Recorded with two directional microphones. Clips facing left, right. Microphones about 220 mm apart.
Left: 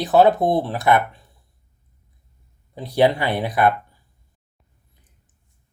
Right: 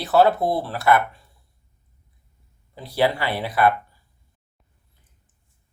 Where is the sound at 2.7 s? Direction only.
20° left (ahead or behind).